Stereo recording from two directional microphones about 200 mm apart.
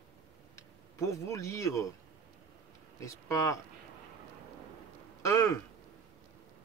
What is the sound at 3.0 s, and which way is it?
Speech, 15° left (ahead or behind).